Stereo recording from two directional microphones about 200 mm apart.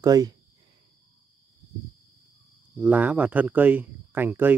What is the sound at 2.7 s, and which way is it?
Speech, 10° right (ahead or behind).